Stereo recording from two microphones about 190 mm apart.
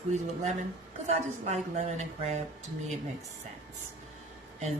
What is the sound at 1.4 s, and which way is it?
Speech, 35° right (ahead or behind).